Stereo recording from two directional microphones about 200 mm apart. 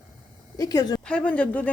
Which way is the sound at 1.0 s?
5° left (ahead or behind).